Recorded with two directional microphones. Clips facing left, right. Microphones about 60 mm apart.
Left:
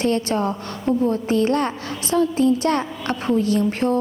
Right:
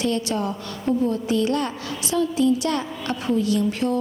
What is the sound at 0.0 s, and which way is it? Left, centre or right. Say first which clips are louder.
A woman's voice: left 3 dB; left.